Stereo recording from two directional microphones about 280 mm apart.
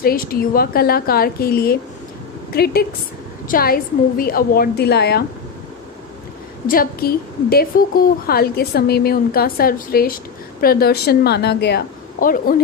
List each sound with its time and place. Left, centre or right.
0.0 s a woman's voice: left
6.7 s a woman's voice: left